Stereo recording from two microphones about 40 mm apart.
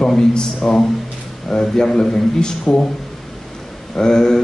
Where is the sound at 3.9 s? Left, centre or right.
Centre.